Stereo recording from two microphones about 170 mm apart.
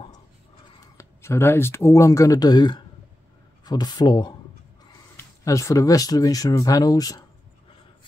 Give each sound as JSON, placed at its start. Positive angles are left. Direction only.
{"t": 0.9, "sound": "speech", "side_deg": 15}